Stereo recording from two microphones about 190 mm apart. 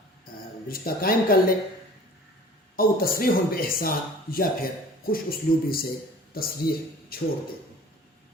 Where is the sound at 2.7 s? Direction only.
50° left (ahead or behind).